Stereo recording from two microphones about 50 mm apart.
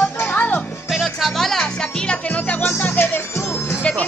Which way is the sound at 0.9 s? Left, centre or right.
Centre.